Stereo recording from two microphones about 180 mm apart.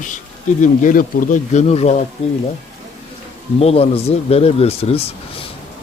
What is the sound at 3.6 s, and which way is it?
Speech, 35° left (ahead or behind).